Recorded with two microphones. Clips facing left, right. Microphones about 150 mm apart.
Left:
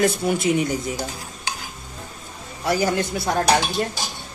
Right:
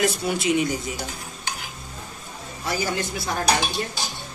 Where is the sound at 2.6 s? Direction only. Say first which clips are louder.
Left 5 dB; 55° left (ahead or behind).